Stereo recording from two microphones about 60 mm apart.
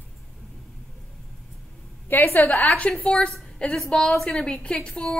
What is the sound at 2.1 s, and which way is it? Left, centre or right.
Speech, left.